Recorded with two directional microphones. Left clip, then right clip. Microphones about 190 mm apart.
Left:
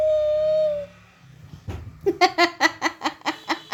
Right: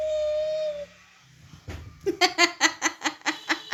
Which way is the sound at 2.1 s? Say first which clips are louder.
Left 3 dB; 35° left (ahead or behind).